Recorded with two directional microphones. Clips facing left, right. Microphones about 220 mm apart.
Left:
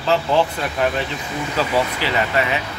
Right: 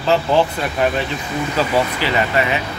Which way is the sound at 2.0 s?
5° right (ahead or behind).